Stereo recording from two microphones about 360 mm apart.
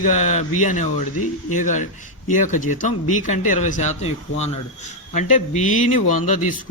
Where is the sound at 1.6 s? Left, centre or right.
Left.